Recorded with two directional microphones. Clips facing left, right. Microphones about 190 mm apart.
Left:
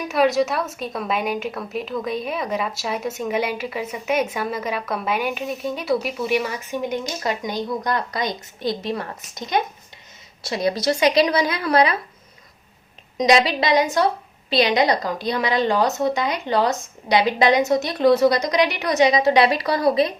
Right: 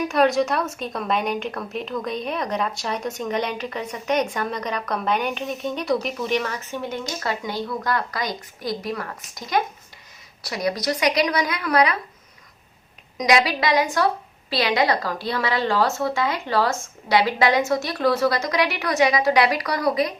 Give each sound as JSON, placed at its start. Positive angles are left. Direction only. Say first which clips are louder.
{"t": 0.1, "sound": "a woman's voice", "louder": "left 3 dB", "side_deg": 0}
{"t": 13.1, "sound": "a woman's voice", "louder": "left 3 dB", "side_deg": 25}